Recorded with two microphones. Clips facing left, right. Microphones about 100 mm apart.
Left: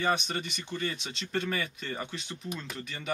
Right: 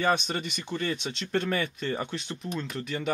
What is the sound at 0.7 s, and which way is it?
Speech, 60° right (ahead or behind).